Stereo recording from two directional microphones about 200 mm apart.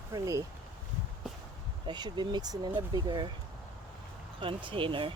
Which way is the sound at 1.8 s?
20° right (ahead or behind).